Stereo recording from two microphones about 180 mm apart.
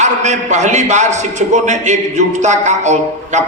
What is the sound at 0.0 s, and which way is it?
A man's voice, 40° right (ahead or behind).